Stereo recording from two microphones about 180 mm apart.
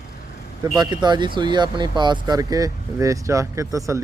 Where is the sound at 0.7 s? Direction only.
25° right (ahead or behind).